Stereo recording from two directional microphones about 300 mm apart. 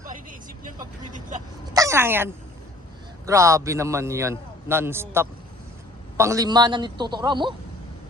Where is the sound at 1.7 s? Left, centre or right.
Centre.